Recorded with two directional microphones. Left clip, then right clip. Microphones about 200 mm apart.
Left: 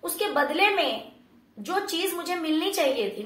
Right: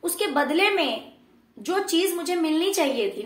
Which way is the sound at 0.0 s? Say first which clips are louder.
Right 1 dB; 35° right (ahead or behind).